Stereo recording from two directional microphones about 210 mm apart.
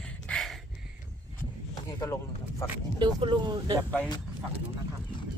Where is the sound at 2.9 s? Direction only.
20° right (ahead or behind).